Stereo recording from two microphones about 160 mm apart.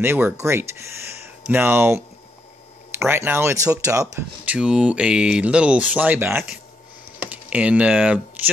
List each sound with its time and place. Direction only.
0.0 s speech: 15° right (ahead or behind)
4.5 s speech: 5° right (ahead or behind)